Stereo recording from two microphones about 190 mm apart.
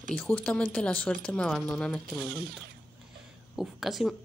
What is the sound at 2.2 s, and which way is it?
Speech, 55° right (ahead or behind).